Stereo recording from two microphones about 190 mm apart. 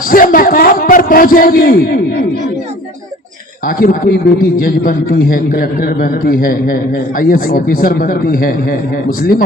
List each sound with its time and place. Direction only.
0.1 s a man's voice: 50° left (ahead or behind)
3.8 s a man's voice: 50° left (ahead or behind)